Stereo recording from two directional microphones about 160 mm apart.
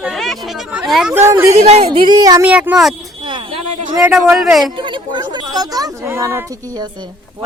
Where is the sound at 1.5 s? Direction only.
45° right (ahead or behind).